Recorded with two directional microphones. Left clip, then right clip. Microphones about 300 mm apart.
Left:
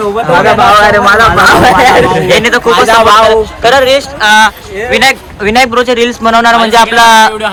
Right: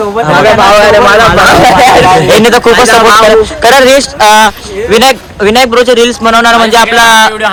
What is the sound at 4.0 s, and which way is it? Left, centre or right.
Speech, centre.